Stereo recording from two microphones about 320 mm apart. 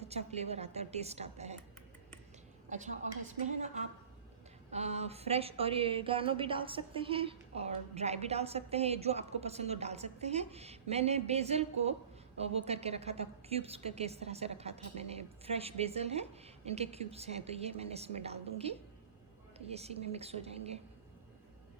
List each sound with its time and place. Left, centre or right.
0.0 s speech: centre
2.6 s speech: right